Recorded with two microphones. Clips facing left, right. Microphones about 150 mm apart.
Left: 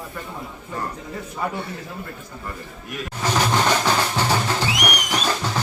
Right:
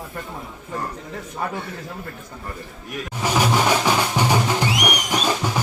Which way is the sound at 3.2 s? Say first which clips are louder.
Right 1 dB; 10° right (ahead or behind).